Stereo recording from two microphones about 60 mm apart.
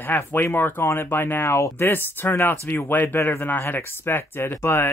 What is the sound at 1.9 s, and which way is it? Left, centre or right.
Speech, left.